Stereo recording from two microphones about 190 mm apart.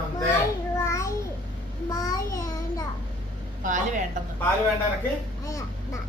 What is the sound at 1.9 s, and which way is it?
Child singing, 20° left (ahead or behind).